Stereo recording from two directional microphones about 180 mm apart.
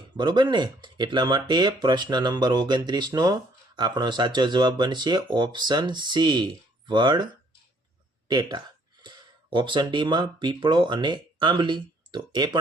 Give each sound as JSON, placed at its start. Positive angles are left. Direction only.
{"t": 0.2, "sound": "speech", "side_deg": -25}
{"t": 8.3, "sound": "speech", "side_deg": -25}